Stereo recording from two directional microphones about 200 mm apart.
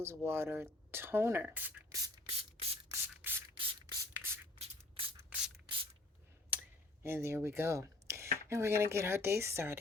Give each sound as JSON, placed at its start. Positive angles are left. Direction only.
{"t": 0.0, "sound": "speech", "side_deg": -10}
{"t": 2.2, "sound": "spray", "side_deg": -30}
{"t": 2.9, "sound": "spray", "side_deg": -10}
{"t": 3.6, "sound": "spray", "side_deg": -25}
{"t": 4.5, "sound": "a sound", "side_deg": -30}
{"t": 5.6, "sound": "spray", "side_deg": -25}
{"t": 6.5, "sound": "speech", "side_deg": -10}